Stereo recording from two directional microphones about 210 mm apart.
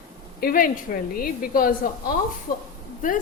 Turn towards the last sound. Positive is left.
turn(degrees=40)  # may be behind; listen again after turning